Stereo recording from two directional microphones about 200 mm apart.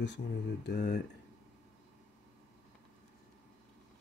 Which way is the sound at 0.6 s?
50° left (ahead or behind).